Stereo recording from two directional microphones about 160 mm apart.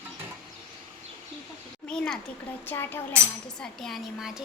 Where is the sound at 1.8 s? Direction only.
5° left (ahead or behind).